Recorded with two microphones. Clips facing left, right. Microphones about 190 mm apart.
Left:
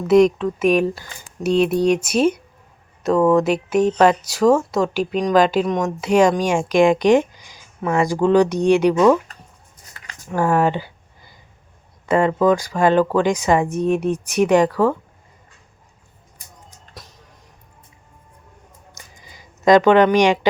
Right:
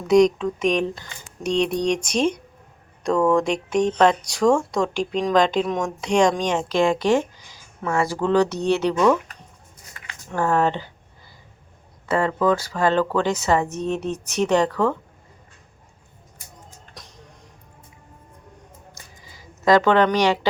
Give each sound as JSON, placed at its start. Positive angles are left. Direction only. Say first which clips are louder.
{"t": 0.1, "sound": "speech", "louder": "left 2 dB", "side_deg": 5}
{"t": 10.2, "sound": "speech", "louder": "left 3 dB", "side_deg": 10}
{"t": 12.0, "sound": "speech", "louder": "left 4 dB", "side_deg": 15}
{"t": 16.9, "sound": "music", "louder": "left 5 dB", "side_deg": 5}
{"t": 18.9, "sound": "a sound", "louder": "left 1 dB", "side_deg": 15}